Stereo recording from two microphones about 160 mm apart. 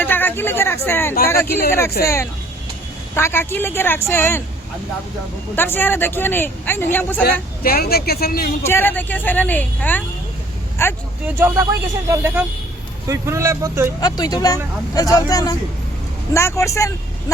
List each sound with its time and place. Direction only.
0.0 s a sound: 10° left (ahead or behind)
0.9 s speech: 15° left (ahead or behind)
2.0 s speech: 70° left (ahead or behind)
3.2 s speech: 15° left (ahead or behind)
5.5 s speech: 10° left (ahead or behind)
7.3 s speech: 70° left (ahead or behind)
8.6 s speech: 15° left (ahead or behind)
11.3 s speech: 20° right (ahead or behind)
14.0 s speech: 25° left (ahead or behind)